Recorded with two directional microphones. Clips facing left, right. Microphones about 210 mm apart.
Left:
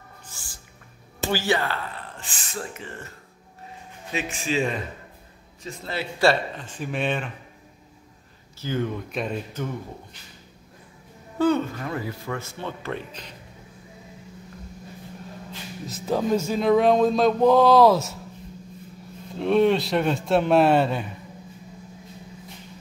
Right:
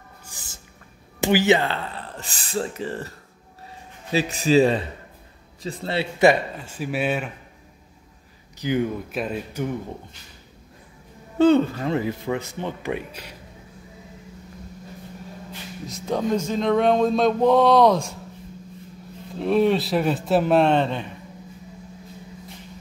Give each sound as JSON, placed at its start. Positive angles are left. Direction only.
{"t": 0.2, "sound": "music", "side_deg": -15}
{"t": 1.2, "sound": "speech", "side_deg": -20}
{"t": 2.1, "sound": "speech", "side_deg": -40}
{"t": 4.1, "sound": "speech", "side_deg": -35}
{"t": 6.2, "sound": "speech", "side_deg": -10}
{"t": 8.5, "sound": "speech", "side_deg": -15}
{"t": 11.3, "sound": "speech", "side_deg": -25}
{"t": 15.9, "sound": "speech", "side_deg": 5}
{"t": 19.3, "sound": "speech", "side_deg": 0}